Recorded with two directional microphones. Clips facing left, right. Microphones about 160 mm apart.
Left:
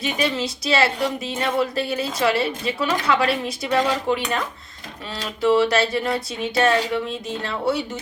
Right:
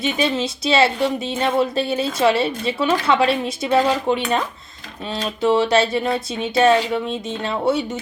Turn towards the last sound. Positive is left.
turn(degrees=-20)  # may be behind; listen again after turning